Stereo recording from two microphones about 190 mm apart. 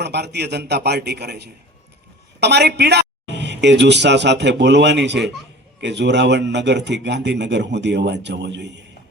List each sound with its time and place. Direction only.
0.0 s speech: 60° right (ahead or behind)